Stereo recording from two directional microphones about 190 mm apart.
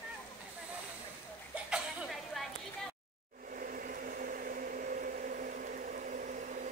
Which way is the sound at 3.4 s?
45° right (ahead or behind).